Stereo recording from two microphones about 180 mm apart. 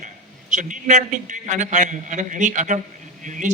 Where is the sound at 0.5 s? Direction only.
45° right (ahead or behind).